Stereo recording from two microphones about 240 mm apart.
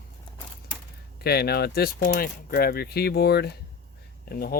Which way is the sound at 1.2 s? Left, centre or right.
Left.